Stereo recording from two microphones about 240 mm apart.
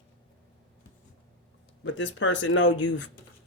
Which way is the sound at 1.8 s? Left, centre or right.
Left.